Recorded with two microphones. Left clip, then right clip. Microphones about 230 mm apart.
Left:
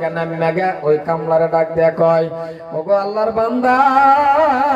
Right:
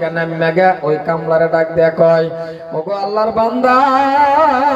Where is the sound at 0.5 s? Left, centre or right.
Centre.